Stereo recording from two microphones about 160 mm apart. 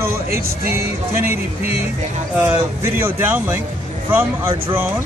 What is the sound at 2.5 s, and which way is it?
Speech, 15° right (ahead or behind).